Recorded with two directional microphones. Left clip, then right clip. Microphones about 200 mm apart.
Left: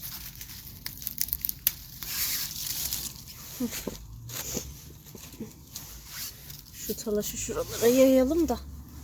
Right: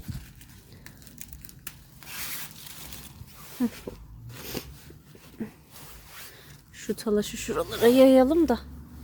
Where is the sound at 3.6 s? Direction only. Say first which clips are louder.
Right 4 dB; 35° right (ahead or behind).